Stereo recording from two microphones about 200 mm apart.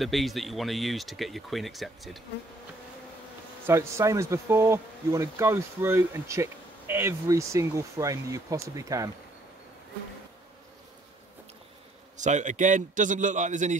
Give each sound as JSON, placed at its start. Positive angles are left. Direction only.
{"t": 0.0, "sound": "speech", "side_deg": 0}
{"t": 3.6, "sound": "speech", "side_deg": -15}
{"t": 12.2, "sound": "a man's voice", "side_deg": -35}